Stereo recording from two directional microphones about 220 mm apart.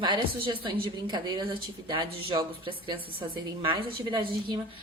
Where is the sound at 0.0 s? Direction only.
20° right (ahead or behind).